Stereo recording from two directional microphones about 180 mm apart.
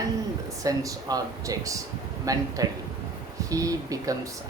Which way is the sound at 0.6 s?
20° right (ahead or behind).